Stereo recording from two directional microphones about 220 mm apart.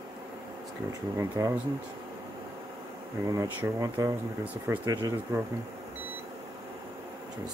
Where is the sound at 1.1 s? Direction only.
10° right (ahead or behind).